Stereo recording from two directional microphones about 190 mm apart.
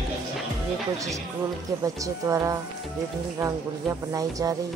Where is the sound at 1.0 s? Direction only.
15° right (ahead or behind).